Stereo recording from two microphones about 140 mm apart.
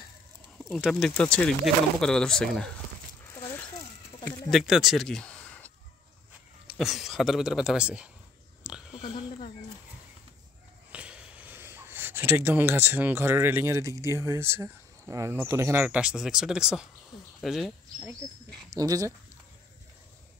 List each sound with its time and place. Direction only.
0.7 s speech: centre (ahead or behind)
3.3 s a sound: 20° left (ahead or behind)
4.2 s a sound: 5° left (ahead or behind)
6.7 s speech: centre (ahead or behind)
8.9 s oink: 40° left (ahead or behind)
10.9 s speech: 10° right (ahead or behind)
18.7 s speech: 25° right (ahead or behind)